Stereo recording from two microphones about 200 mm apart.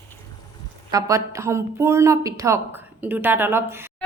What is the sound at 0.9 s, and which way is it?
Speech, 15° right (ahead or behind).